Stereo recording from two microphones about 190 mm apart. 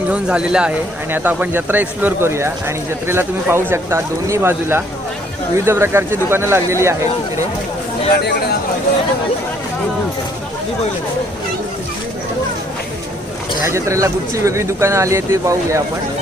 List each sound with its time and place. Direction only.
0.1 s speech: 5° right (ahead or behind)
8.1 s speech: 60° left (ahead or behind)
13.7 s speech: 15° right (ahead or behind)